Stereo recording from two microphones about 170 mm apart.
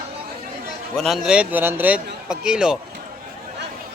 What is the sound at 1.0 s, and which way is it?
A man's voice, centre (ahead or behind).